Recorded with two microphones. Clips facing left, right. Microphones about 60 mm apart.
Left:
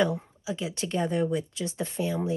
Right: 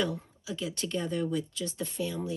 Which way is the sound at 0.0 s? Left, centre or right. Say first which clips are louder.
Left 6 dB; centre.